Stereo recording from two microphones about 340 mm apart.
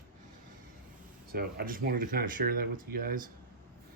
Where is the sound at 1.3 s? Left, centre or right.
Right.